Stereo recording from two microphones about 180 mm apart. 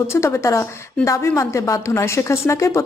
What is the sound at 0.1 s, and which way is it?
A woman's voice, 15° left (ahead or behind).